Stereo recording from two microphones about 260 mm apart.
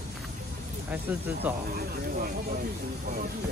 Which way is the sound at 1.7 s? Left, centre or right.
Right.